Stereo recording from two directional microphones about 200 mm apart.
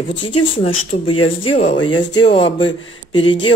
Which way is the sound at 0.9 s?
35° left (ahead or behind).